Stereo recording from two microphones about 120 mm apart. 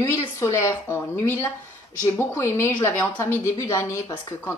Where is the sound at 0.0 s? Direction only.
25° left (ahead or behind).